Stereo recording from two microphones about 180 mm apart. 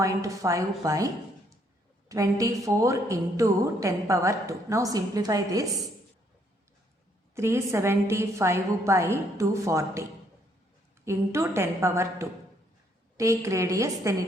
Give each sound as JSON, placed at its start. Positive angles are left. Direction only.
{"t": 0.0, "sound": "a woman's voice", "side_deg": -15}
{"t": 7.3, "sound": "a woman's voice", "side_deg": -15}